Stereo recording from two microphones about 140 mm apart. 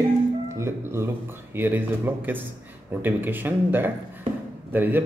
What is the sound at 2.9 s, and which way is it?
A man's voice, 15° right (ahead or behind).